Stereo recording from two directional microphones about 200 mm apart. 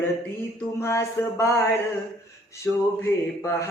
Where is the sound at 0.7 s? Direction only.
15° left (ahead or behind).